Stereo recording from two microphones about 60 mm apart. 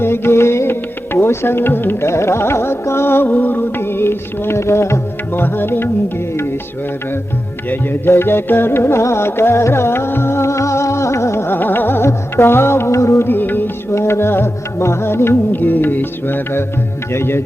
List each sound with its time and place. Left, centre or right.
0.0 s music: left
2.0 s music: left
5.3 s music: left
7.7 s music: left
13.2 s music: left
13.9 s music: left
15.5 s music: left